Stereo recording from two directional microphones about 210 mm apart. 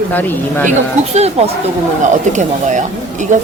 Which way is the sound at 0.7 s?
30° right (ahead or behind).